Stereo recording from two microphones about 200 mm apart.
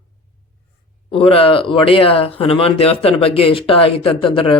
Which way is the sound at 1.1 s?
25° left (ahead or behind).